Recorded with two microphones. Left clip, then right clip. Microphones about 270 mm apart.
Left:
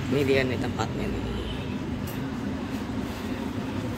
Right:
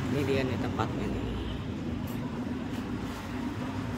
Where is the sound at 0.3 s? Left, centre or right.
Centre.